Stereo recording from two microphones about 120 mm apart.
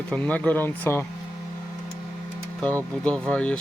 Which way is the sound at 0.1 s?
10° left (ahead or behind).